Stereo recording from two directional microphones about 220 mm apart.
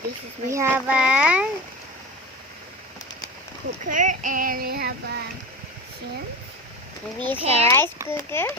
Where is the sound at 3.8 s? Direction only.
35° right (ahead or behind).